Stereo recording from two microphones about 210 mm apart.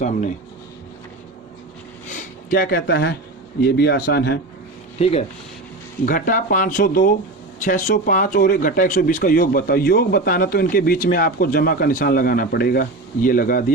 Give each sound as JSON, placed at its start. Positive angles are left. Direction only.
{"t": 2.0, "sound": "a sound", "side_deg": 40}
{"t": 3.6, "sound": "speech", "side_deg": 50}
{"t": 5.0, "sound": "speech", "side_deg": 30}